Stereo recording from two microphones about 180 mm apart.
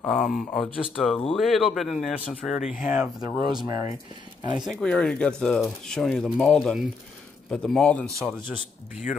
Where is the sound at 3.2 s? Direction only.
25° right (ahead or behind).